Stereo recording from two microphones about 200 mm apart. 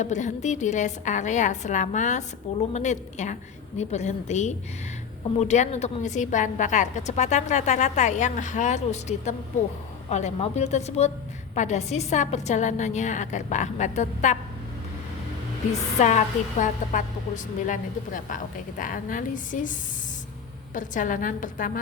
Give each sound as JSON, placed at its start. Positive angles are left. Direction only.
{"t": 0.0, "sound": "a woman's voice", "side_deg": 35}
{"t": 16.0, "sound": "a woman's voice", "side_deg": 35}
{"t": 20.7, "sound": "a woman's voice", "side_deg": 40}